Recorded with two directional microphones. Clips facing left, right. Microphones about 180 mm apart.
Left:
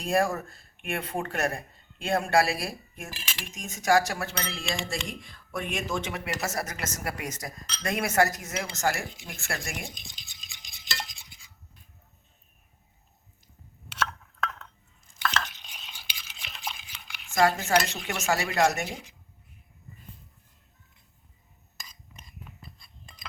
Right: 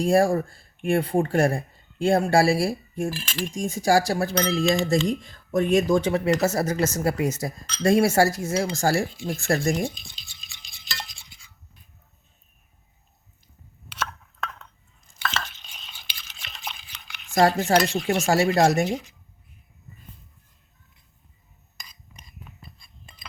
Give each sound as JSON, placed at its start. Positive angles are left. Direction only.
{"t": 0.0, "sound": "speech", "side_deg": -30}
{"t": 9.9, "sound": "stir", "side_deg": 15}
{"t": 13.9, "sound": "a sound", "side_deg": -10}
{"t": 15.5, "sound": "stir", "side_deg": 10}
{"t": 17.3, "sound": "speech", "side_deg": -35}